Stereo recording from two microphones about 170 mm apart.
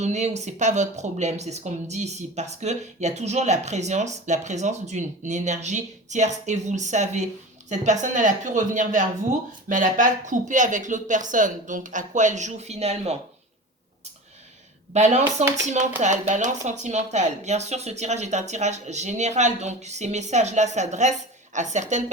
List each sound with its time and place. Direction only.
0.0 s speech: 40° right (ahead or behind)
14.9 s speech: 40° right (ahead or behind)